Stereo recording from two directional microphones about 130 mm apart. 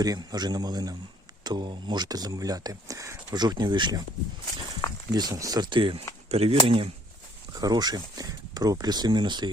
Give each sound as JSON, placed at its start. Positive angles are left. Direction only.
{"t": 0.0, "sound": "speech", "side_deg": -30}
{"t": 5.1, "sound": "speech", "side_deg": -30}
{"t": 6.2, "sound": "speech", "side_deg": -50}
{"t": 7.5, "sound": "speech", "side_deg": -30}